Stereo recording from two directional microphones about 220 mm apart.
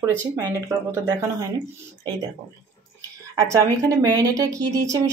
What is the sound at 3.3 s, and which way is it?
Speech, 15° right (ahead or behind).